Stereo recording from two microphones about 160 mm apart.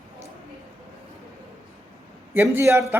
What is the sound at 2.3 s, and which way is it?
Speech, 15° right (ahead or behind).